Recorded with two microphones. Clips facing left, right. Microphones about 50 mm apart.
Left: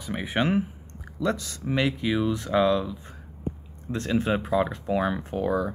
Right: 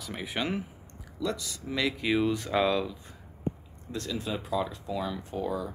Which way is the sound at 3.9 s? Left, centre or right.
Left.